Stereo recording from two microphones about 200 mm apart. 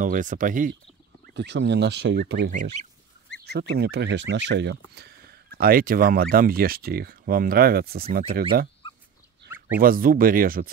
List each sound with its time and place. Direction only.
0.0 s speech: 40° right (ahead or behind)
1.2 s speech: 60° right (ahead or behind)
2.5 s speech: 35° right (ahead or behind)
3.4 s speech: 55° right (ahead or behind)
9.8 s speech: 45° right (ahead or behind)